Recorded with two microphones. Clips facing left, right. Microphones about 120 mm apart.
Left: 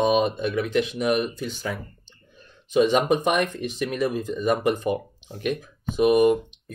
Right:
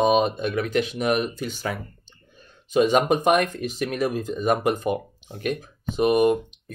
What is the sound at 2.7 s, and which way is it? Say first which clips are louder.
Speech: even; 45° right (ahead or behind).